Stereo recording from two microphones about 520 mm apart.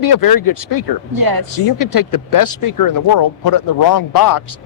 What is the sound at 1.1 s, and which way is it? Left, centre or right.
Speech, right.